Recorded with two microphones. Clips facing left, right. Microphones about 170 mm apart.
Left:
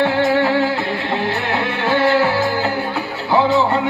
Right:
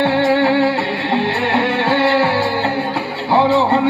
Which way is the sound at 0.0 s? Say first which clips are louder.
Right 2 dB; 30° right (ahead or behind).